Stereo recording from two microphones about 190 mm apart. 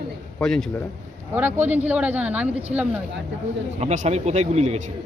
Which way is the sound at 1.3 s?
10° right (ahead or behind).